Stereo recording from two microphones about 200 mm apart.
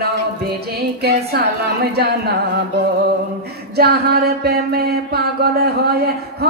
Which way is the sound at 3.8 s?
50° right (ahead or behind).